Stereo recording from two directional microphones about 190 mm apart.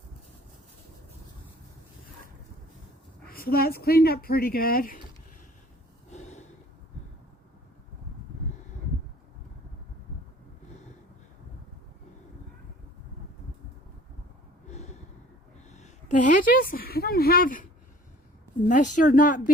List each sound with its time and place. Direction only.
3.2 s speech: 50° left (ahead or behind)
6.1 s gasp: 35° left (ahead or behind)
14.7 s gasp: 35° left (ahead or behind)
15.7 s a sound: 40° left (ahead or behind)
18.7 s speech: 40° left (ahead or behind)